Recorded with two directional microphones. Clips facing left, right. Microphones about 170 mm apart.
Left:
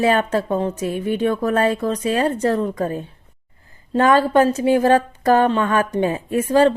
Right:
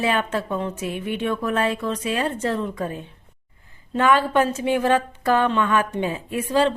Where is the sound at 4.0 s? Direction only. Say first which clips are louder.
Left 4 dB; 40° left (ahead or behind).